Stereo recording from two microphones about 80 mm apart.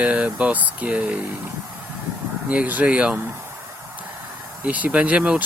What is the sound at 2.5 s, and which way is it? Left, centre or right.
Speech, centre.